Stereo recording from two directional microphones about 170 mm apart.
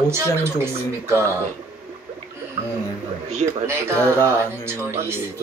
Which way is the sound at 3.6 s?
15° right (ahead or behind).